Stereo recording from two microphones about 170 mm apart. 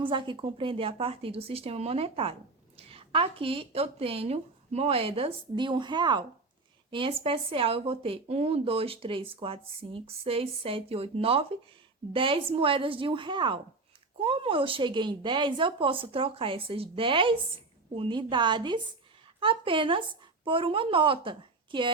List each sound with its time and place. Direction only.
0.0 s a woman's voice: 30° right (ahead or behind)